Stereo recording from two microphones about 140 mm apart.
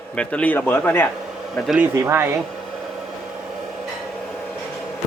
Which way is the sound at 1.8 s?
20° right (ahead or behind).